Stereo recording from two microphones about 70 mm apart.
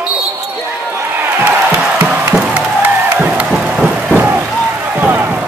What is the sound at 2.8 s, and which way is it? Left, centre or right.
Music, right.